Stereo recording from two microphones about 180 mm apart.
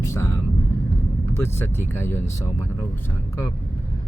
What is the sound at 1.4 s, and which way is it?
Speech, 15° left (ahead or behind).